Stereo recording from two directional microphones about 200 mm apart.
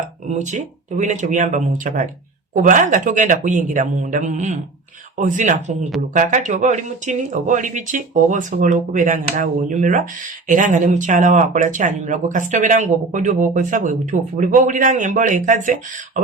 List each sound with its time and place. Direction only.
0.3 s speech: 40° right (ahead or behind)